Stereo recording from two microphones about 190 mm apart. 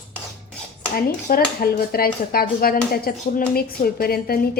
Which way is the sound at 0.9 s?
50° left (ahead or behind).